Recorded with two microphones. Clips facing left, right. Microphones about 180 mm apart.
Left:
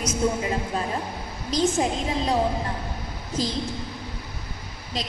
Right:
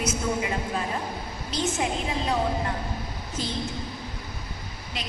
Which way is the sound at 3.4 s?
35° left (ahead or behind).